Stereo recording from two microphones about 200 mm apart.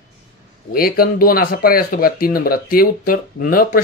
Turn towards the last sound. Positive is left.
turn(degrees=45)  # may be behind; listen again after turning